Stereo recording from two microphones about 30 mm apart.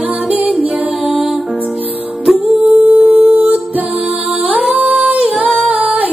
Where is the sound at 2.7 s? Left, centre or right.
Right.